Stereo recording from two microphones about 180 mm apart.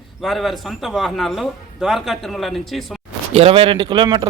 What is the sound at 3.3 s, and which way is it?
Speech, 30° right (ahead or behind).